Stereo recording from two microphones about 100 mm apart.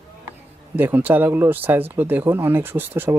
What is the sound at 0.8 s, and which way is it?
Speech, 20° right (ahead or behind).